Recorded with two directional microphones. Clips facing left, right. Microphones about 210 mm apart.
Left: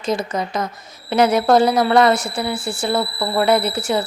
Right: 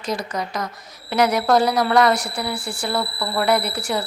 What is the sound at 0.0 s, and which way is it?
A woman's voice, 25° left (ahead or behind).